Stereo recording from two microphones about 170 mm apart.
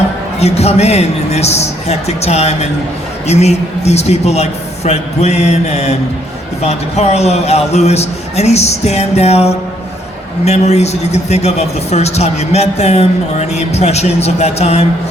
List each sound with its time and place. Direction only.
0.3 s a man's voice: 40° left (ahead or behind)